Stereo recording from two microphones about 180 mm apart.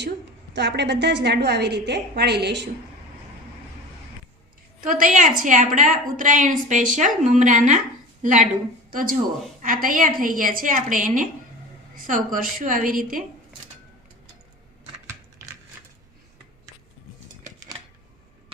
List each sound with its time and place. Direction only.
0.5 s a woman's voice: 70° right (ahead or behind)
4.8 s a woman's voice: 50° right (ahead or behind)